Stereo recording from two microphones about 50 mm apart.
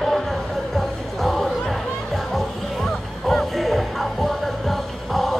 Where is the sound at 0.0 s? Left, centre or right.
Centre.